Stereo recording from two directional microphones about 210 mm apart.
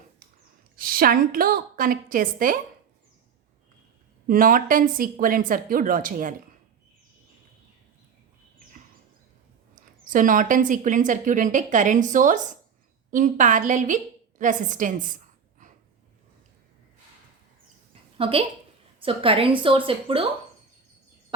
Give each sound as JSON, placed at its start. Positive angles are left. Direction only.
{"t": 0.8, "sound": "a woman's voice", "side_deg": -45}
{"t": 4.3, "sound": "speech", "side_deg": -40}
{"t": 9.7, "sound": "a woman's voice", "side_deg": -40}
{"t": 18.2, "sound": "a woman's voice", "side_deg": -25}